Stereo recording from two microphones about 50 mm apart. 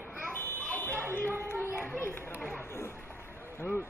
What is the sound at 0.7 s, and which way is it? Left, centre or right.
Buzzer, left.